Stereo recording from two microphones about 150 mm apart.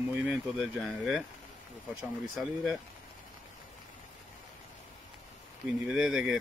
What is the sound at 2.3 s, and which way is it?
Speech, centre (ahead or behind).